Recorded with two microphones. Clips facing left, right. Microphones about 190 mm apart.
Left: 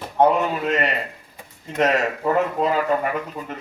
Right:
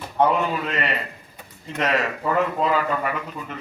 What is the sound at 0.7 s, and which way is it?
Speech, 45° left (ahead or behind).